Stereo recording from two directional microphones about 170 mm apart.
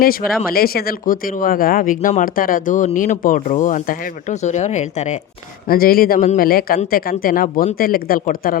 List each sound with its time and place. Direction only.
0.0 s speech: 60° left (ahead or behind); by 5.2 s 45° left (ahead or behind)
5.6 s speech: 60° left (ahead or behind)